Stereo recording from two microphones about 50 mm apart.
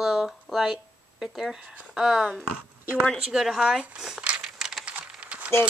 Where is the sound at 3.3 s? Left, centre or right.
Centre.